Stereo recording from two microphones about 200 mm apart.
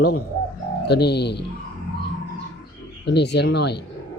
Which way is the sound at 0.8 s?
55° left (ahead or behind).